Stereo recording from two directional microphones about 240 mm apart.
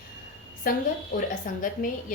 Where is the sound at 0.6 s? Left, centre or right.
Left.